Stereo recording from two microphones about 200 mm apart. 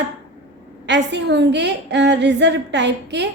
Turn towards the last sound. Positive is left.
turn(degrees=-60)  # may be behind; listen again after turning